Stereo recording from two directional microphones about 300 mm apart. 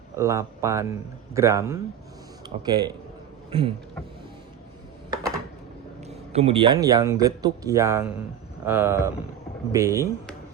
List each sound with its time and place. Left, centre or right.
0.2 s speech: centre
6.1 s speech: centre